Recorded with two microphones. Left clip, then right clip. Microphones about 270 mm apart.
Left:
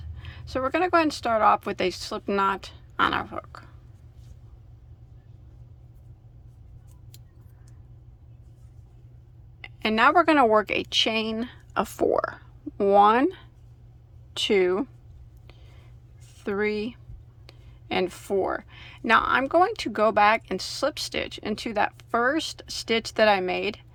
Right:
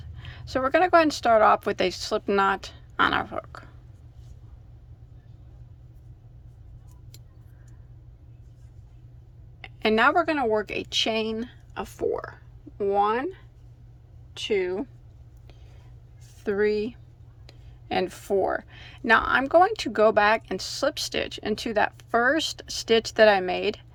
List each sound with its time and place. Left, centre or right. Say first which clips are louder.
0.0 s a woman's voice: right 1 dB; centre
9.6 s a woman's voice: right 1 dB; centre
11.8 s speech: left 5 dB; left
16.4 s speech: right 3 dB; centre